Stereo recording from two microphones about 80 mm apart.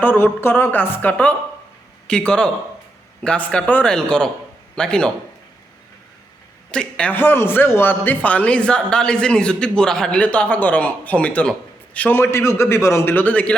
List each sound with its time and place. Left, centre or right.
0.0 s a man's voice: left; by 5.1 s centre
6.7 s speech: centre
7.1 s a man's voice: left